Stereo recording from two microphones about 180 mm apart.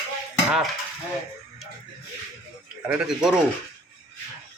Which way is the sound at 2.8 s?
5° right (ahead or behind).